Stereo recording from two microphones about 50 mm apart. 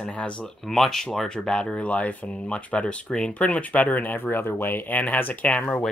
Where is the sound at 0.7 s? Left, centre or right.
Centre.